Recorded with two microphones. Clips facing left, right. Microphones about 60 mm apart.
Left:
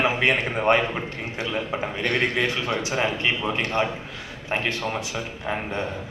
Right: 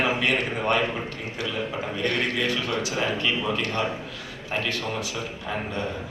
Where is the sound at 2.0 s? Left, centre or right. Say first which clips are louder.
Left 2 dB; left.